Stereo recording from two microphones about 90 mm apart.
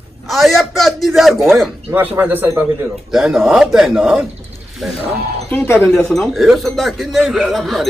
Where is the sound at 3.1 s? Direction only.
5° right (ahead or behind).